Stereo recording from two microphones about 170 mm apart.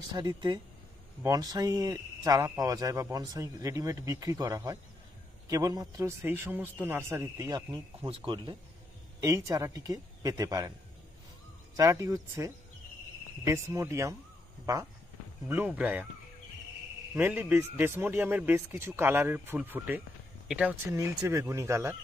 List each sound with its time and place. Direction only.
0.1 s a man's voice: 25° right (ahead or behind)
9.2 s speech: 20° right (ahead or behind)
11.7 s a man's voice: 20° right (ahead or behind)
15.4 s a man's voice: 10° right (ahead or behind)
17.1 s a man's voice: 10° right (ahead or behind)